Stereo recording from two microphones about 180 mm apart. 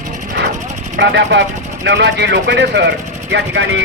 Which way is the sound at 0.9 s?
75° right (ahead or behind).